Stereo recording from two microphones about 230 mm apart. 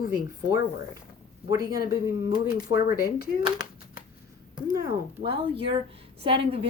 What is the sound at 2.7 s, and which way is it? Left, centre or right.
Speech, left.